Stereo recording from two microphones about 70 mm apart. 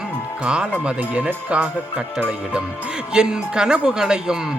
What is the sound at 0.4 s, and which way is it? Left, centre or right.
Speech, centre.